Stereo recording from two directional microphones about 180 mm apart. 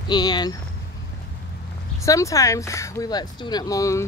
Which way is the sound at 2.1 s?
20° left (ahead or behind).